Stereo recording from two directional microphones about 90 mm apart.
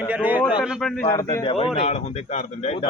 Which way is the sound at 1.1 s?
35° left (ahead or behind).